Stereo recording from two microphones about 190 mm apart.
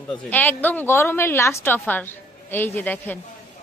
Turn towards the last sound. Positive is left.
turn(degrees=10)  # may be behind; listen again after turning